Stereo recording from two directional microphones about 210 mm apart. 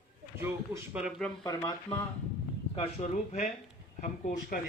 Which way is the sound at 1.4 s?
20° left (ahead or behind).